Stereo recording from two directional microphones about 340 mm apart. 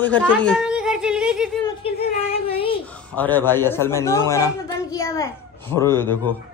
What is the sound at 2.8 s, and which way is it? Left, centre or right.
Speech, centre.